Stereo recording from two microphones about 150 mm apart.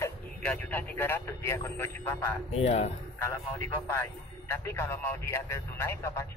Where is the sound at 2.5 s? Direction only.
45° left (ahead or behind).